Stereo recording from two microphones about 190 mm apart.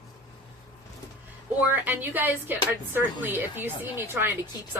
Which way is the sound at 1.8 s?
10° right (ahead or behind).